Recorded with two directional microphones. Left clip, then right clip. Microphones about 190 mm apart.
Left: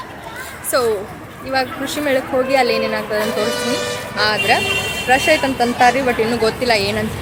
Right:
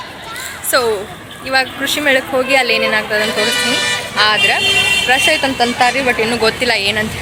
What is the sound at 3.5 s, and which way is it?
Speech, 40° left (ahead or behind).